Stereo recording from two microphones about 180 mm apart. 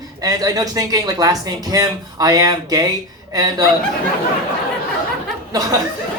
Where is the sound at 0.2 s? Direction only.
20° right (ahead or behind).